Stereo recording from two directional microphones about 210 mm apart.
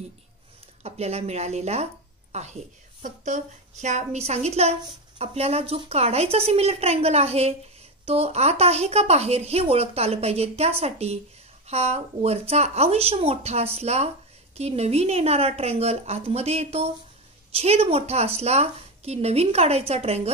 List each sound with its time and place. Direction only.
0.8 s a woman's voice: 30° right (ahead or behind)